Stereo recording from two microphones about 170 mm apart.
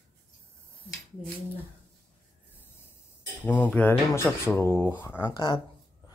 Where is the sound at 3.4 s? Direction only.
10° left (ahead or behind).